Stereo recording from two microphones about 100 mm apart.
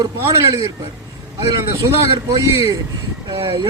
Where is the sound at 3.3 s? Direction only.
50° right (ahead or behind).